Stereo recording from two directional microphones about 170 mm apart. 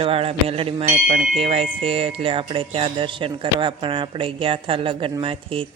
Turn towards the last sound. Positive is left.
turn(degrees=-30)  # may be behind; listen again after turning